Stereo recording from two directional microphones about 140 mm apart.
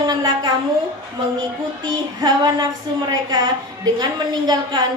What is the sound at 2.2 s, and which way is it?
A woman's voice, 30° right (ahead or behind).